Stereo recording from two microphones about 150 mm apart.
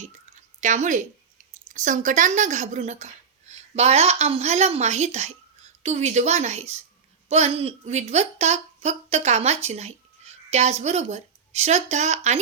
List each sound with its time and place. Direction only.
0.6 s a woman's voice: 55° right (ahead or behind)